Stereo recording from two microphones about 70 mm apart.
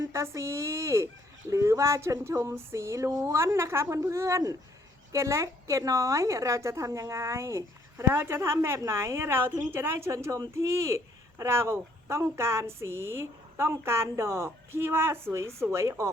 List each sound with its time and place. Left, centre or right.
0.0 s a woman's voice: right
2.6 s a woman's voice: right